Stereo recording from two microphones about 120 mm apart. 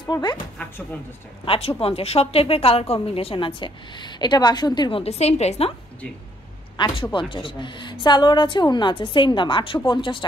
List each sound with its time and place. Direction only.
0.0 s a woman's voice: 35° left (ahead or behind)
0.6 s speech: 15° left (ahead or behind)
1.4 s a woman's voice: 50° left (ahead or behind)
5.0 s a woman's voice: 65° left (ahead or behind)
6.8 s a woman's voice: 40° left (ahead or behind)